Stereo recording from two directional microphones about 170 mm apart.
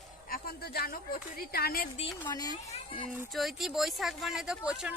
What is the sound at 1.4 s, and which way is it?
Speech, 65° left (ahead or behind).